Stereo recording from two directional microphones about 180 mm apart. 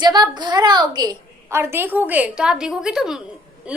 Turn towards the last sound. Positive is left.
turn(degrees=-5)  # may be behind; listen again after turning